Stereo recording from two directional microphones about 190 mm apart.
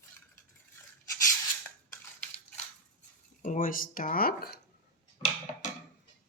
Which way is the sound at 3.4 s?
45° left (ahead or behind).